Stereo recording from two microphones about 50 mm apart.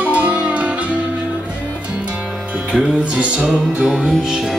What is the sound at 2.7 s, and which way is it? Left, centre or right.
Music, right.